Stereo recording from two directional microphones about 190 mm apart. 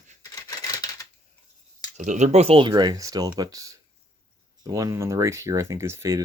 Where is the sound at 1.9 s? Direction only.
40° right (ahead or behind).